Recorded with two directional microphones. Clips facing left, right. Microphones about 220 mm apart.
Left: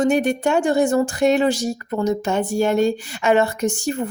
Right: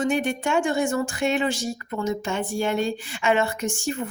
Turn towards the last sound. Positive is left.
turn(degrees=40)  # may be behind; listen again after turning